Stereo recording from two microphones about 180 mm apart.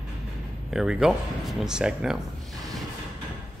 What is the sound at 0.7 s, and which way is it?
Speech, 5° right (ahead or behind).